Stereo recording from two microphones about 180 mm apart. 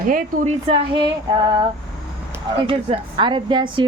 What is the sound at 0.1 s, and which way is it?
Speech, 50° right (ahead or behind).